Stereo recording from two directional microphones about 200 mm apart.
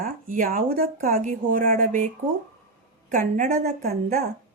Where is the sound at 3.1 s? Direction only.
40° right (ahead or behind).